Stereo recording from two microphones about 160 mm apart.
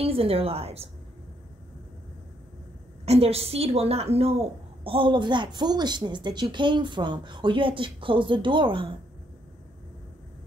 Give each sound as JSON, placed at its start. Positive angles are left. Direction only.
{"t": 0.0, "sound": "a woman's voice", "side_deg": -35}
{"t": 3.1, "sound": "a woman's voice", "side_deg": -40}